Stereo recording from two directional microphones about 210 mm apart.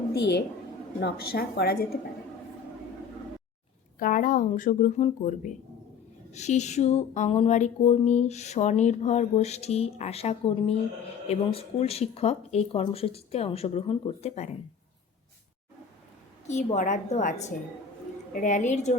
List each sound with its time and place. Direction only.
0.1 s a woman's voice: 50° left (ahead or behind)
4.0 s speech: 40° left (ahead or behind)
16.5 s speech: 35° left (ahead or behind)